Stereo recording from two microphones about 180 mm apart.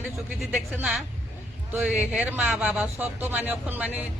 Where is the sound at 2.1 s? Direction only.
10° right (ahead or behind).